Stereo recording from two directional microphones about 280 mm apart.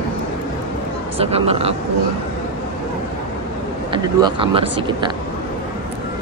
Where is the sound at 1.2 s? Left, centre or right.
Right.